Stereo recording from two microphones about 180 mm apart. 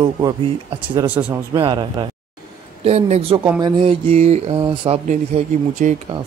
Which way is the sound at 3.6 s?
25° right (ahead or behind).